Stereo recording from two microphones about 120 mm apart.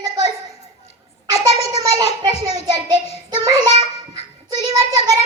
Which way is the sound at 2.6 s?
35° right (ahead or behind).